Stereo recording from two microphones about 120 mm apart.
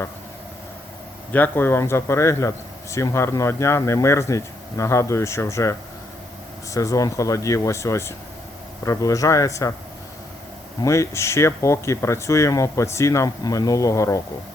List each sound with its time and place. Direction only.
1.3 s speech: 15° left (ahead or behind)
6.7 s speech: 30° left (ahead or behind)
10.8 s speech: 25° left (ahead or behind)